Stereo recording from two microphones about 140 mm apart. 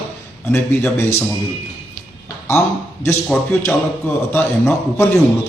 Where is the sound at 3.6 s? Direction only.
15° left (ahead or behind).